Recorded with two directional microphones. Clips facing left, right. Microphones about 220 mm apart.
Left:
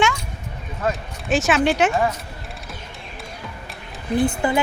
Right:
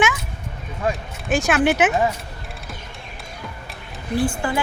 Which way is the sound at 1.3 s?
Centre (ahead or behind).